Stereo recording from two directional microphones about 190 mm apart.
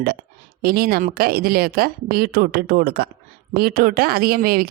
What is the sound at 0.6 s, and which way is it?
Speech, 50° right (ahead or behind).